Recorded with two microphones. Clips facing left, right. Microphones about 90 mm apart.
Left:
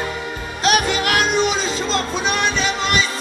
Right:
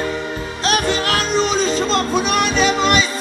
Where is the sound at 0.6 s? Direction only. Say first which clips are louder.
Left 1 dB; 35° right (ahead or behind).